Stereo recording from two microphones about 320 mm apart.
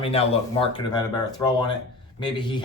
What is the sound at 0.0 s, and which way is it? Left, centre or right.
Speech, centre.